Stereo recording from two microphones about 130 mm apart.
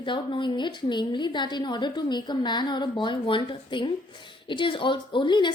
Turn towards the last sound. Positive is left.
turn(degrees=35)  # may be behind; listen again after turning